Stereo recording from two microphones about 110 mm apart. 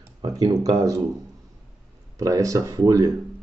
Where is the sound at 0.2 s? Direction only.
35° right (ahead or behind).